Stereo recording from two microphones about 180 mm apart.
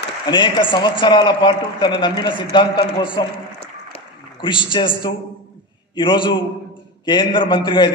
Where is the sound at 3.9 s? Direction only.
25° left (ahead or behind).